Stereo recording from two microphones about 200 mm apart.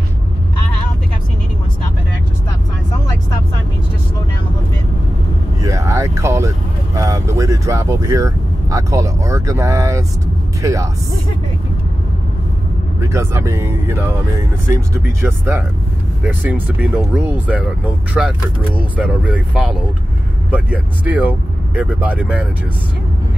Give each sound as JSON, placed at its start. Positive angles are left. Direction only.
{"t": 5.6, "sound": "vehicle", "side_deg": -15}
{"t": 7.0, "sound": "speech", "side_deg": -15}
{"t": 13.0, "sound": "speech", "side_deg": -15}
{"t": 15.2, "sound": "speech", "side_deg": -10}